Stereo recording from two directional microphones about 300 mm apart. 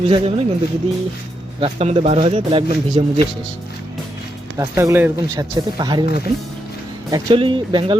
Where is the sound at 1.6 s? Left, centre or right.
Right.